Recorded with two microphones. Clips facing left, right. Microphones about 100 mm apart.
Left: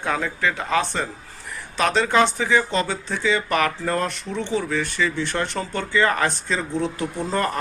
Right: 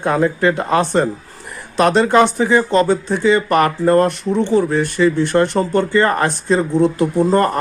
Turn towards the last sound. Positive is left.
turn(degrees=-40)  # may be behind; listen again after turning